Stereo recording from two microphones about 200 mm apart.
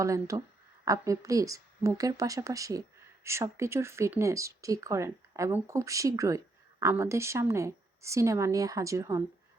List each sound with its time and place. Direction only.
0.0 s speech: 15° right (ahead or behind)